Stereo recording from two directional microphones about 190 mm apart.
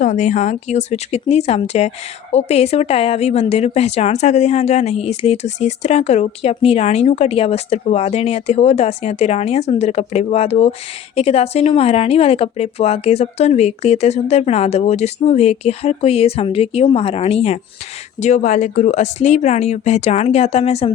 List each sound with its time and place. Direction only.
0.0 s a woman's voice: 40° left (ahead or behind)